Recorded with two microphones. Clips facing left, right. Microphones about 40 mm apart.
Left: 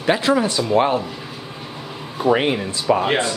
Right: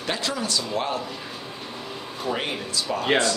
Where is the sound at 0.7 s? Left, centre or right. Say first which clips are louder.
Left 12 dB; left.